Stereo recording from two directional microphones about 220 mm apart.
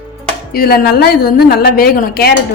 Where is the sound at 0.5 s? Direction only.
45° left (ahead or behind).